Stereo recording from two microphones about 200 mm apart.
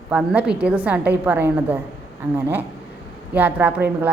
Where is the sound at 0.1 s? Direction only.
5° right (ahead or behind).